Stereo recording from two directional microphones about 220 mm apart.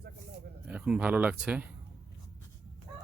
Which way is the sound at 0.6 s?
5° right (ahead or behind).